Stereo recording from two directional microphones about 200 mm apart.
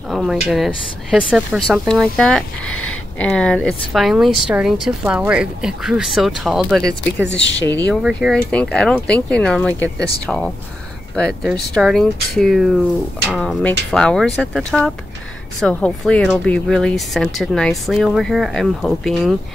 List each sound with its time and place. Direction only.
0.1 s speech: centre (ahead or behind)
7.4 s a woman's voice: 60° left (ahead or behind)
7.8 s speech: 5° left (ahead or behind)
15.6 s speech: 5° left (ahead or behind)